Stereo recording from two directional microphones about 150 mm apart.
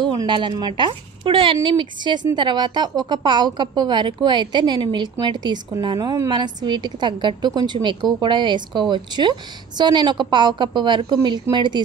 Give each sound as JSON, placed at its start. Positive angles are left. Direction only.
{"t": 0.0, "sound": "a woman's voice", "side_deg": -30}